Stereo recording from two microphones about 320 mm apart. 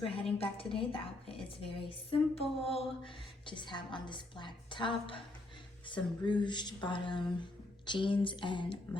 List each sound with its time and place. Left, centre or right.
0.0 s a woman's voice: centre